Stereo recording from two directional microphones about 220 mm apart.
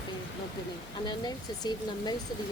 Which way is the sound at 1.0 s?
20° left (ahead or behind).